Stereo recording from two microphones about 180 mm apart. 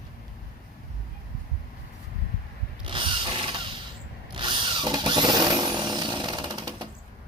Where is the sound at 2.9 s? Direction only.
30° right (ahead or behind).